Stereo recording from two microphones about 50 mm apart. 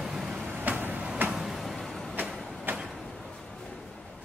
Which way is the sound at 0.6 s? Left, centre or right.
Right.